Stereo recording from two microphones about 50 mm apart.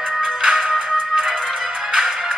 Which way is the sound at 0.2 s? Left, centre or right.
Centre.